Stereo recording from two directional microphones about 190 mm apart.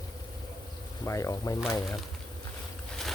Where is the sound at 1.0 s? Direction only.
15° left (ahead or behind).